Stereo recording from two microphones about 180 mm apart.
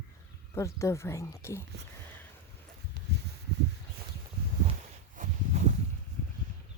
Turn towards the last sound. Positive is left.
turn(degrees=-40)  # may be behind; listen again after turning